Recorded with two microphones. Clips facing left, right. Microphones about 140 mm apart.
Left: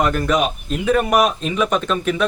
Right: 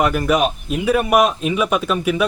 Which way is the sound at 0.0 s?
10° right (ahead or behind).